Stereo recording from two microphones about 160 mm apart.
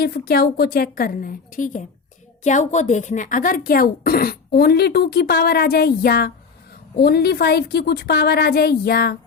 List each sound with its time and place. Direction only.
0.0 s a woman's voice: 75° left (ahead or behind)